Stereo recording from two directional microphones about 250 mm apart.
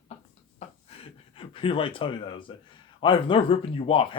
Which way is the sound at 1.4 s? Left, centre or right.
Left.